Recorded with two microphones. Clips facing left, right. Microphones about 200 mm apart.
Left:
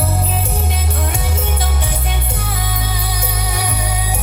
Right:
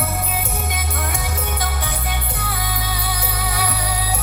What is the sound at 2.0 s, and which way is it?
Music, 25° left (ahead or behind).